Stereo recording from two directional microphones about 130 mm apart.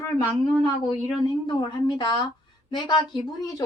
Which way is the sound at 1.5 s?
35° left (ahead or behind).